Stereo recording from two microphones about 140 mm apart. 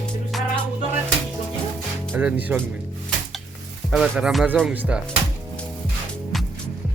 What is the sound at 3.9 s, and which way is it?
Speech, 5° right (ahead or behind).